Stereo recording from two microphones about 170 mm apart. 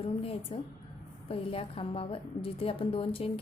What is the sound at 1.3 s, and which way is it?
A woman's voice, 35° left (ahead or behind).